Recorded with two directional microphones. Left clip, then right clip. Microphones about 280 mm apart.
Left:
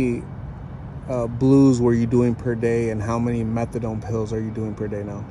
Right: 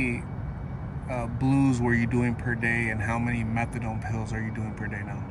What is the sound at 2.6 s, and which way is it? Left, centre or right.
Speech, centre.